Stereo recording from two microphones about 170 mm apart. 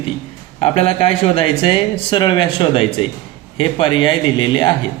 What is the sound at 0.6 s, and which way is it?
A man's voice, 35° left (ahead or behind).